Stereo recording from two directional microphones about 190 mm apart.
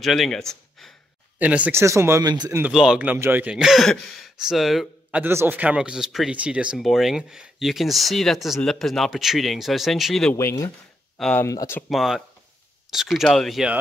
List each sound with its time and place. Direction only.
0.0 s speech: centre (ahead or behind); by 2.6 s 20° right (ahead or behind)
2.6 s speech: 5° right (ahead or behind)
5.2 s speech: 10° right (ahead or behind)
10.3 s speech: 15° left (ahead or behind)
11.1 s speech: 5° left (ahead or behind)
11.4 s speech: 15° left (ahead or behind)
11.9 s speech: centre (ahead or behind)